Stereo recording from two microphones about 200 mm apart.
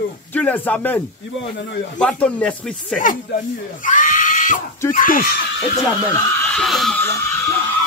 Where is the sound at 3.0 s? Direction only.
40° left (ahead or behind).